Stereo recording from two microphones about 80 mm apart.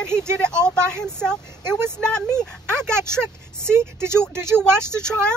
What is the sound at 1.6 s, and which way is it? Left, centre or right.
Speech, right.